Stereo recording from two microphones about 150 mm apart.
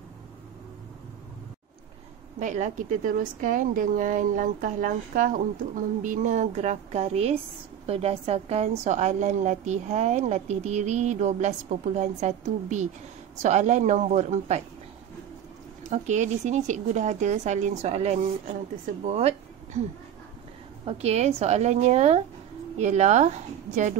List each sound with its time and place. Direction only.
2.4 s a woman's voice: 55° right (ahead or behind)
15.9 s a woman's voice: 55° right (ahead or behind)
19.0 s a sound: 45° right (ahead or behind)
20.8 s a woman's voice: 45° right (ahead or behind)